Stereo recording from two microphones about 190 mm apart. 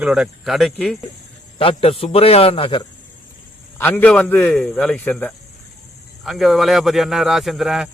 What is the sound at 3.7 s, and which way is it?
A man's voice, 10° left (ahead or behind).